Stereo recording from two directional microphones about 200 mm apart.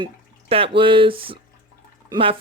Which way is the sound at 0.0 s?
30° right (ahead or behind).